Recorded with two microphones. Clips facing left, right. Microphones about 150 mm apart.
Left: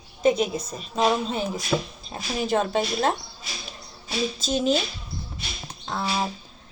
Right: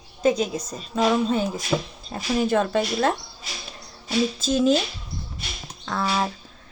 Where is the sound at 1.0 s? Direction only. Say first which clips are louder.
Right 2 dB; 55° right (ahead or behind).